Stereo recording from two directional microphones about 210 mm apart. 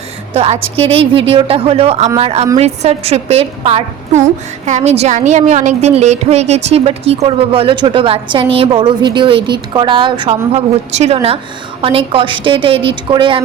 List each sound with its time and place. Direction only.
0.3 s a woman's voice: 30° right (ahead or behind)